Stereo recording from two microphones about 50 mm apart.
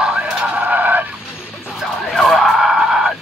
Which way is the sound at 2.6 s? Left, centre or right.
Centre.